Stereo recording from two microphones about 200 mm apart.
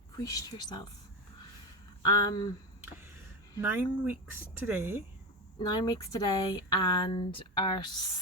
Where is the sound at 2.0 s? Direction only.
15° left (ahead or behind).